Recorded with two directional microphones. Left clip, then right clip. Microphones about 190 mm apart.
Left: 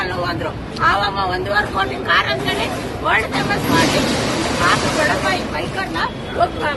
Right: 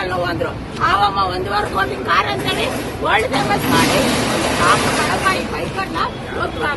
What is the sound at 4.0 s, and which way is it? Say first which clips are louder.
Speech: right 2 dB; 40° right (ahead or behind).